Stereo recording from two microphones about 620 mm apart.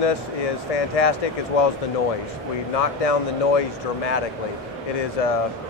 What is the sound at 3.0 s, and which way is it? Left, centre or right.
Speech, left.